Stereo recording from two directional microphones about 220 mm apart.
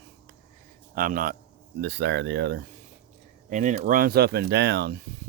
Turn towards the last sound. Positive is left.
turn(degrees=-50)  # may be behind; listen again after turning